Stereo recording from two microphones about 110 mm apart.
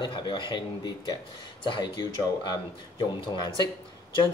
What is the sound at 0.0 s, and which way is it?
Speech, 45° left (ahead or behind).